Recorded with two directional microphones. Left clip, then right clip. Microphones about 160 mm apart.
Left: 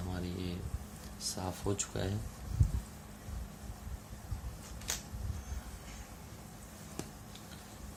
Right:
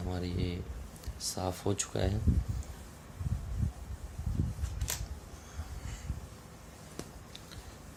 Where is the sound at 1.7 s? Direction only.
45° right (ahead or behind).